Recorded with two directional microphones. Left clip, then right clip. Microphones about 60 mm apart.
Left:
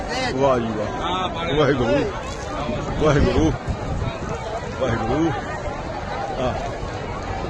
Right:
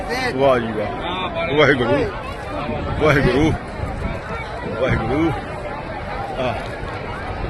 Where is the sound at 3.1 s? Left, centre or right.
Right.